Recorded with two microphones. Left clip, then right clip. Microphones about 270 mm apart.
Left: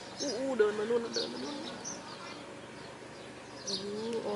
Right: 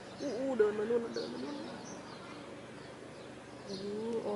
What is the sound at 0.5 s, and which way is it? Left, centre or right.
Speech, centre.